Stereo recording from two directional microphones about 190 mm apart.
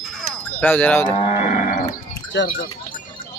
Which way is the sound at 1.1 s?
35° left (ahead or behind).